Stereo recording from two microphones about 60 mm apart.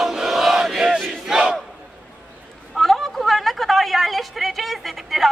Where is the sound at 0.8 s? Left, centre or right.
Centre.